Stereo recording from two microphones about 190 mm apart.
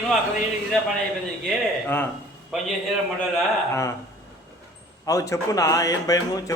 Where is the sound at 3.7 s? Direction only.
15° left (ahead or behind).